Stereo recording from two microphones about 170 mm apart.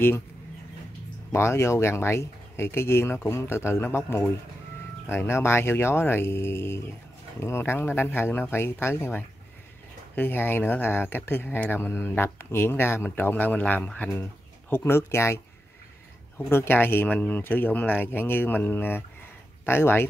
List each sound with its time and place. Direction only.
1.3 s speech: 15° left (ahead or behind)